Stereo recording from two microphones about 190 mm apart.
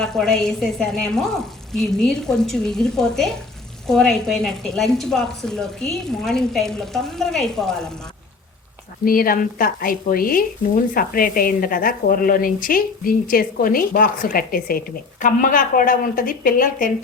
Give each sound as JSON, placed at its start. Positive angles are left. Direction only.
{"t": 0.0, "sound": "a woman's voice", "side_deg": 5}
{"t": 9.0, "sound": "a woman's voice", "side_deg": 50}